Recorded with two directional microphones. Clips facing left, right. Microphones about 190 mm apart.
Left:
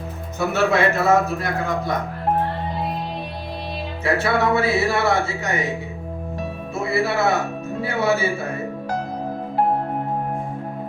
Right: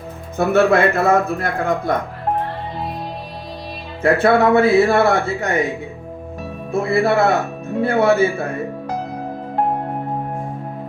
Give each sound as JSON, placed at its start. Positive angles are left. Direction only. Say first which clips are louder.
{"t": 0.3, "sound": "a man's voice", "louder": "right 5 dB", "side_deg": -55}
{"t": 4.0, "sound": "speech", "louder": "right 6 dB", "side_deg": -55}
{"t": 6.7, "sound": "a man's voice", "louder": "right 6 dB", "side_deg": -55}